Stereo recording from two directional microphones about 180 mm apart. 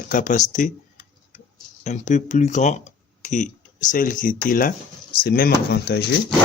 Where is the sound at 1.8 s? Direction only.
40° left (ahead or behind); by 6.0 s 60° left (ahead or behind).